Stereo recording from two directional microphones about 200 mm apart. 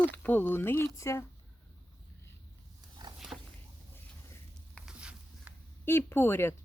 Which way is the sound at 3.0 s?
20° right (ahead or behind).